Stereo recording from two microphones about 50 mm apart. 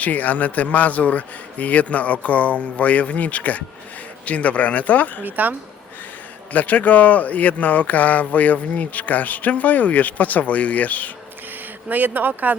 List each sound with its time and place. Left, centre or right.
0.0 s speech: left
5.2 s speech: right
6.5 s speech: left
11.9 s speech: right